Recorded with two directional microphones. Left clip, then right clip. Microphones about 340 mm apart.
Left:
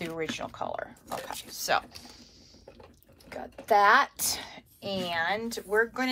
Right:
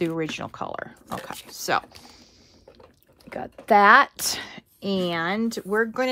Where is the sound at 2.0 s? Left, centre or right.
Centre.